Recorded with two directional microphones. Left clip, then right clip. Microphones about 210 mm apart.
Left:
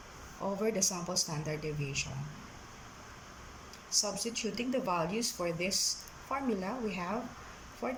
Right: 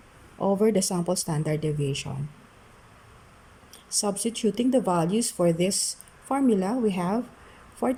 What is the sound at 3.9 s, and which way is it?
Speech, 35° right (ahead or behind).